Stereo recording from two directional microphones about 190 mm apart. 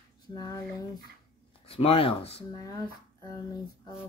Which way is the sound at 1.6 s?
30° left (ahead or behind).